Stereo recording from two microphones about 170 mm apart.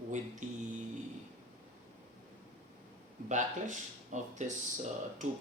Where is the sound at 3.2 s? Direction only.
45° right (ahead or behind).